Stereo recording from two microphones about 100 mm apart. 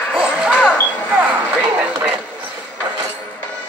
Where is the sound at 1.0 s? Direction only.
10° right (ahead or behind).